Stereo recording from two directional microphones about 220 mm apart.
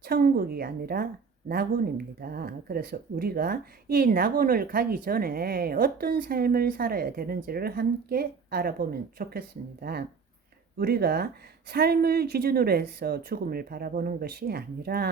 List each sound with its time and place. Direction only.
0.0 s speech: 45° right (ahead or behind)
2.2 s speech: 45° right (ahead or behind)